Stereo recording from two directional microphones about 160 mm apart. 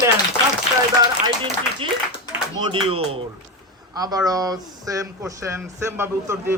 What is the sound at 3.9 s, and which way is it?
Speech, 25° right (ahead or behind).